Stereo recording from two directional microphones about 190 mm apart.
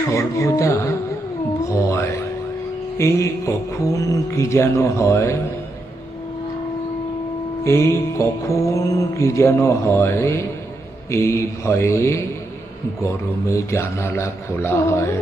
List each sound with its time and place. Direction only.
0.1 s mantra: 15° left (ahead or behind)
1.6 s music: 15° left (ahead or behind)
3.0 s mantra: 15° left (ahead or behind)
7.6 s mantra: 15° left (ahead or behind)
13.5 s mantra: 15° left (ahead or behind)